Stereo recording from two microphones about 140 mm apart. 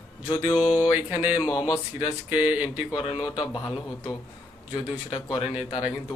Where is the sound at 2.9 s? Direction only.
40° left (ahead or behind).